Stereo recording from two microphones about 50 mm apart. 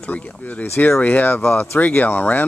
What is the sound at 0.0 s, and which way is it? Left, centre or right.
Speech, left.